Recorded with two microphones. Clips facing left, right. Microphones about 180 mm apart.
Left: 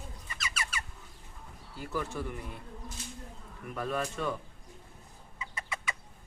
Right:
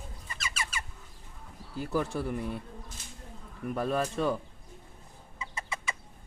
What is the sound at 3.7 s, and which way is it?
Speech, 35° right (ahead or behind).